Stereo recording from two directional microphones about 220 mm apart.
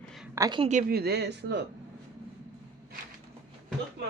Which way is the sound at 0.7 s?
40° right (ahead or behind).